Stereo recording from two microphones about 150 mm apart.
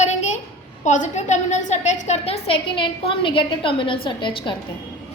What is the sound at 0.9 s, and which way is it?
A woman's voice, 50° left (ahead or behind).